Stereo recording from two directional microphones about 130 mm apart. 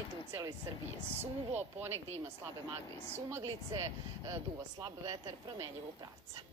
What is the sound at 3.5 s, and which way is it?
Speech, 25° right (ahead or behind).